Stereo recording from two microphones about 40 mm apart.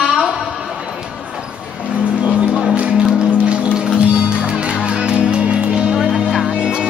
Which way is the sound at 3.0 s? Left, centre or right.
Right.